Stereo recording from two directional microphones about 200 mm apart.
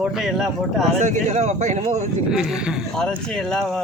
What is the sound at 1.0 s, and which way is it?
Speech, 35° right (ahead or behind).